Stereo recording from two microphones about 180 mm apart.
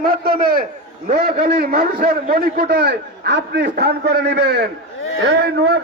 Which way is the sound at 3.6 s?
60° right (ahead or behind).